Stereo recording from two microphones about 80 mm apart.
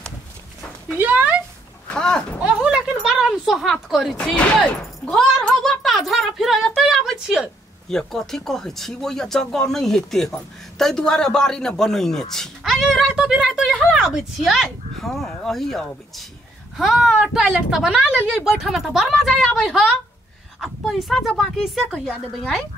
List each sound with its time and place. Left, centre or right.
0.9 s speech: right
1.9 s speech: centre
2.4 s a sound: centre
4.6 s speech: centre
6.8 s a sound: centre
7.9 s speech: centre
21.8 s speech: centre